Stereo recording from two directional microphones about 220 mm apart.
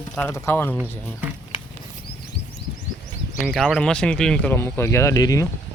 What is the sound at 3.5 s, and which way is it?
Speech, centre (ahead or behind).